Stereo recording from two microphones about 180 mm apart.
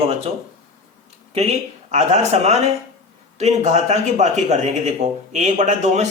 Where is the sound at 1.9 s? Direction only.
40° right (ahead or behind).